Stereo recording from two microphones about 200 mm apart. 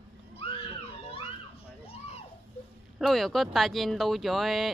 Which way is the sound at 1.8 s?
30° left (ahead or behind).